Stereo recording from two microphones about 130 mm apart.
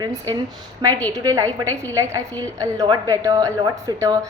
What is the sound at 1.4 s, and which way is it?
Speech, 15° left (ahead or behind).